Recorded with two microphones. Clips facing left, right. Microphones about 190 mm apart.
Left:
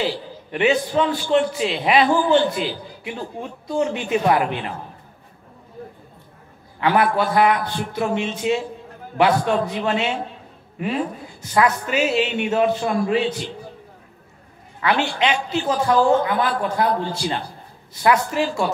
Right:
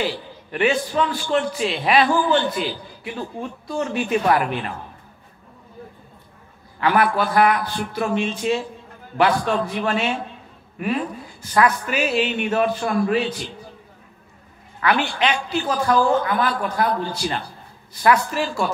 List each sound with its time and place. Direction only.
0.0 s a man's voice: 20° left (ahead or behind)
6.8 s a man's voice: 25° left (ahead or behind)
11.5 s a man's voice: 25° left (ahead or behind)
14.8 s a man's voice: 25° left (ahead or behind)